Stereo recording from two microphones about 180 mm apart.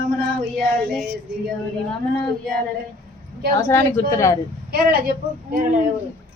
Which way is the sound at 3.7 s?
15° left (ahead or behind).